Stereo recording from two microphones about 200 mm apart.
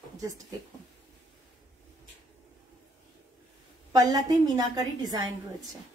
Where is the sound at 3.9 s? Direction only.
20° right (ahead or behind).